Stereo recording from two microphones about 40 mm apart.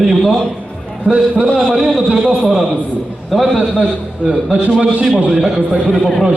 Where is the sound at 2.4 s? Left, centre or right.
Centre.